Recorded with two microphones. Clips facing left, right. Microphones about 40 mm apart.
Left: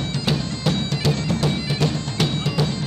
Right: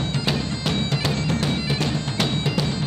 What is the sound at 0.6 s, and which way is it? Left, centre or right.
Bagpipes, centre.